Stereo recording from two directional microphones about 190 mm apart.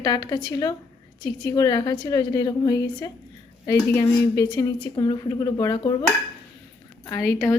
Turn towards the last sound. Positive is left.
turn(degrees=15)  # may be behind; listen again after turning